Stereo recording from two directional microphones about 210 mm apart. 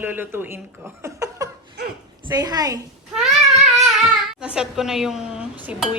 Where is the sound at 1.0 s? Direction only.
15° right (ahead or behind).